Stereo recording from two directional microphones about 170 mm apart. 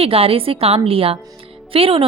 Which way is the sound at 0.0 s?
35° right (ahead or behind).